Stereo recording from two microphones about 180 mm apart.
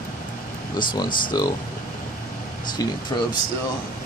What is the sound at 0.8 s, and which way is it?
Speech, 25° left (ahead or behind).